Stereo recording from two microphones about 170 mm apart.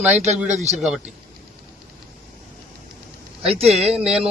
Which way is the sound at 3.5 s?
35° right (ahead or behind).